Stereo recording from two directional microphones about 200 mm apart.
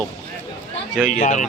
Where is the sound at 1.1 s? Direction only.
40° left (ahead or behind).